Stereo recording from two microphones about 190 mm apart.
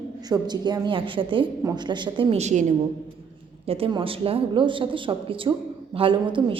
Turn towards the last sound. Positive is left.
turn(degrees=-25)  # may be behind; listen again after turning